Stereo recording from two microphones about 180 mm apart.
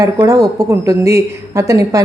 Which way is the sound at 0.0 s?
20° right (ahead or behind).